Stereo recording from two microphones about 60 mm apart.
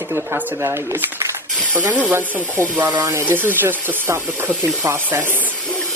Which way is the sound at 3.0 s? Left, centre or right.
Right.